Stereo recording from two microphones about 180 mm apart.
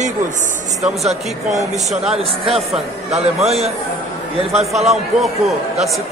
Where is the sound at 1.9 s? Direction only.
Centre (ahead or behind).